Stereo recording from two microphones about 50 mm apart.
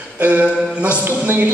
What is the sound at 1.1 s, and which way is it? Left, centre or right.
Speech, right.